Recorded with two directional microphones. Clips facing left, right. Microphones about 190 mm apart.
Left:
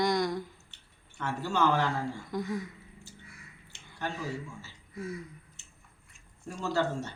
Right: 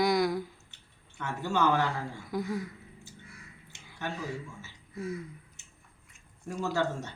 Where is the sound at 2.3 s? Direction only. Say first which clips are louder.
Right 4 dB; 10° right (ahead or behind).